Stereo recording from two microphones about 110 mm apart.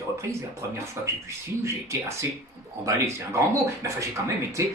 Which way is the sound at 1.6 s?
25° right (ahead or behind).